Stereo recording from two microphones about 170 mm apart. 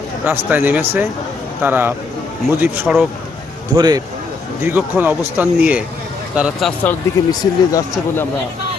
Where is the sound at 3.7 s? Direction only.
25° right (ahead or behind).